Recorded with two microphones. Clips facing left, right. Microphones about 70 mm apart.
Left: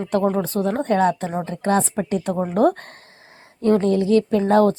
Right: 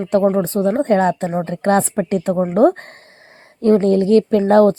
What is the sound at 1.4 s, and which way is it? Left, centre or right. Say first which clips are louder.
A woman's voice: right 4 dB; right.